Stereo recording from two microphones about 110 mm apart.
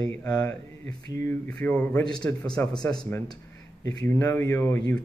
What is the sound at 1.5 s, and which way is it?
Speech, 10° left (ahead or behind).